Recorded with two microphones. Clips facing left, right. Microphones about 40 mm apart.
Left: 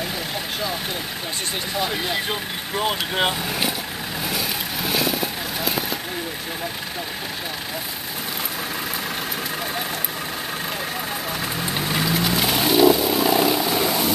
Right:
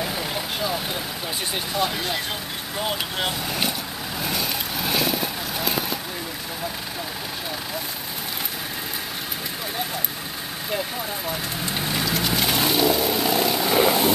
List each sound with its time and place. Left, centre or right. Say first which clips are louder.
1.9 s speech: left 2 dB; centre
3.4 s speech: left 1 dB; centre
4.2 s vehicle: even; centre
11.9 s vehicle: left 3 dB; centre
13.7 s vehicle: right 2 dB; centre